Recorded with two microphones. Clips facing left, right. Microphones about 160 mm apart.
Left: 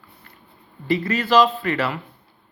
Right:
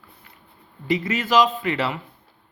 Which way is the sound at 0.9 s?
20° right (ahead or behind).